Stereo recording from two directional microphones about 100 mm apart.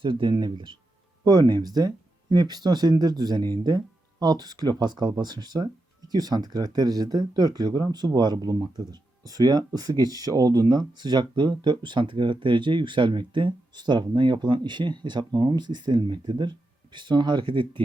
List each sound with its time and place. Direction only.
0.0 s speech: 55° right (ahead or behind)
1.2 s speech: 45° right (ahead or behind)